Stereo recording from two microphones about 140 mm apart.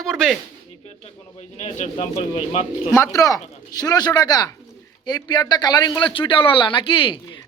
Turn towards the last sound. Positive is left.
turn(degrees=35)  # may be behind; listen again after turning